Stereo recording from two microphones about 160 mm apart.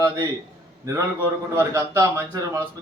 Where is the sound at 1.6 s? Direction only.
15° right (ahead or behind).